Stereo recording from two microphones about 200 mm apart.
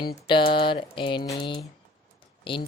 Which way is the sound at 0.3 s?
25° left (ahead or behind).